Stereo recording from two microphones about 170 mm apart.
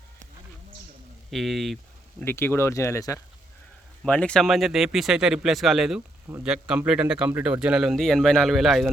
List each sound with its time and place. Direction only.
1.3 s speech: centre (ahead or behind)
2.2 s speech: 15° left (ahead or behind)
4.0 s speech: 5° left (ahead or behind)